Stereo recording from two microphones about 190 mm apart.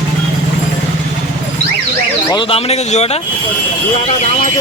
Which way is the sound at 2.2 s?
25° left (ahead or behind).